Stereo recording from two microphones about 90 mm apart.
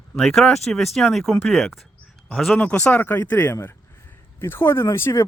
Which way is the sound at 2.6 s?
15° left (ahead or behind).